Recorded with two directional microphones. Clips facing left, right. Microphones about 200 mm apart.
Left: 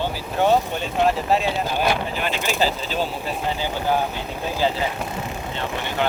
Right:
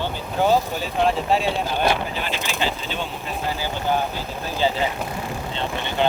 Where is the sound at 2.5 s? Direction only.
40° left (ahead or behind).